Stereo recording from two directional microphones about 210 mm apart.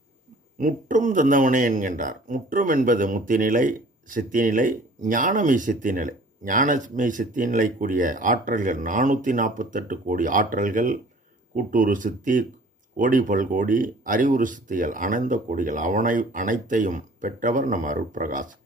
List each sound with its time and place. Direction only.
0.6 s speech: 40° right (ahead or behind)